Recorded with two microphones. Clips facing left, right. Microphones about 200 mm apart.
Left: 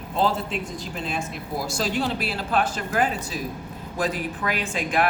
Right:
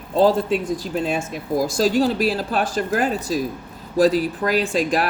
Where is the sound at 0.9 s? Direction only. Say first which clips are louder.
Right 5 dB; 45° right (ahead or behind).